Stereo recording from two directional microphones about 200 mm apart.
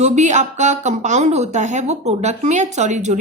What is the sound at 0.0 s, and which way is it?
A woman's voice, 35° right (ahead or behind).